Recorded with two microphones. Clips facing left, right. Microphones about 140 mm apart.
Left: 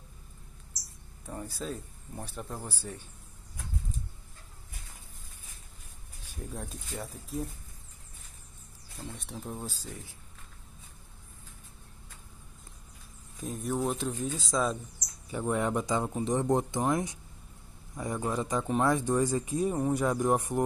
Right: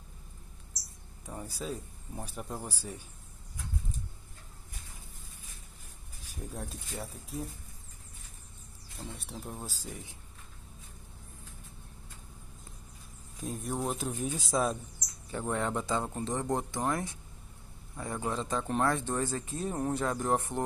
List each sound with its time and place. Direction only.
1.2 s speech: 10° right (ahead or behind)
6.5 s speech: centre (ahead or behind)
9.1 s speech: 5° right (ahead or behind)
13.4 s speech: centre (ahead or behind)
15.3 s speech: 10° left (ahead or behind)